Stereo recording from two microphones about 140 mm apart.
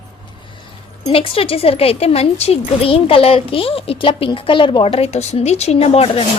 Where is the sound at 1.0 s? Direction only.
40° left (ahead or behind).